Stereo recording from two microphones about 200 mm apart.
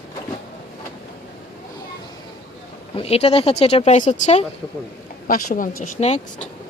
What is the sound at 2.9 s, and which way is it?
Speech, 30° left (ahead or behind).